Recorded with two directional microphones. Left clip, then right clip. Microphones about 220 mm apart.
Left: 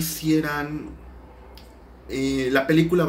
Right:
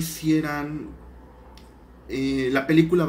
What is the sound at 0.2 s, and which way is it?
Speech, 5° left (ahead or behind).